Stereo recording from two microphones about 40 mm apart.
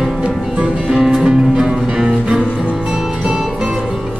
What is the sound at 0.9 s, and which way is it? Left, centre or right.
Music, centre.